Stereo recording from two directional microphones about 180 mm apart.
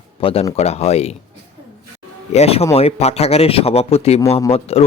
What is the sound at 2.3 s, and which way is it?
Speech, 35° left (ahead or behind).